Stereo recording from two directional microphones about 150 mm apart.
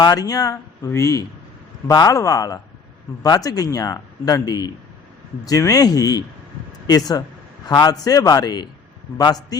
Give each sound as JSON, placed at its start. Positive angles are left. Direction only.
{"t": 0.0, "sound": "speech", "side_deg": 25}